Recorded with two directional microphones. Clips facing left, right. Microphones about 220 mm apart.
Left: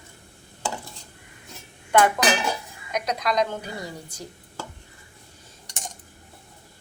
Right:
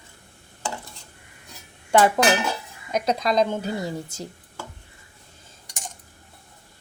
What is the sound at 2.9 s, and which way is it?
A woman's voice, 30° right (ahead or behind).